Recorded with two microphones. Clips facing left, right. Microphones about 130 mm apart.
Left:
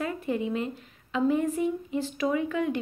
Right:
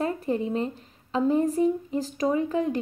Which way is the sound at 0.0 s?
35° right (ahead or behind).